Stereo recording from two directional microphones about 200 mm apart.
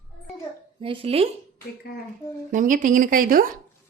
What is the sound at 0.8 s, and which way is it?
Speech, 25° right (ahead or behind).